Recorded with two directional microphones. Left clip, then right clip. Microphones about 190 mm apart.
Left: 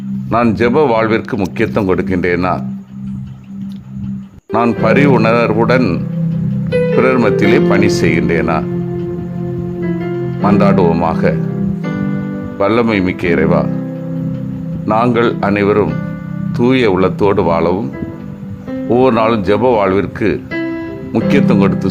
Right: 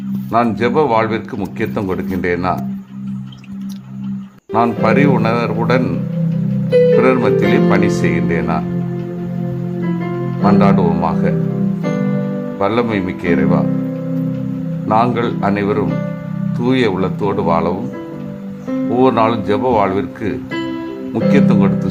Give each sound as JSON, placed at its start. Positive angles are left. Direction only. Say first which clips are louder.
{"t": 0.3, "sound": "speech", "louder": "left 2 dB", "side_deg": 25}
{"t": 4.5, "sound": "speech", "louder": "left 2 dB", "side_deg": 25}
{"t": 6.9, "sound": "speech", "louder": "left 1 dB", "side_deg": 30}
{"t": 10.4, "sound": "speech", "louder": "left 2 dB", "side_deg": 25}
{"t": 11.8, "sound": "music", "louder": "right 1 dB", "side_deg": -5}
{"t": 12.5, "sound": "speech", "louder": "left 4 dB", "side_deg": 25}
{"t": 14.8, "sound": "speech", "louder": "left 2 dB", "side_deg": 25}
{"t": 18.9, "sound": "speech", "louder": "left 2 dB", "side_deg": 30}